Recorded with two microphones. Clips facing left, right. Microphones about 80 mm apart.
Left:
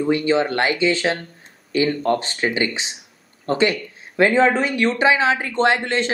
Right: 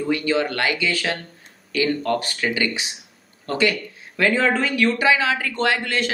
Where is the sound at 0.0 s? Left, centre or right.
Left.